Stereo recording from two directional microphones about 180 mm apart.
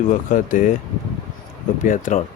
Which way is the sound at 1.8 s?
45° left (ahead or behind).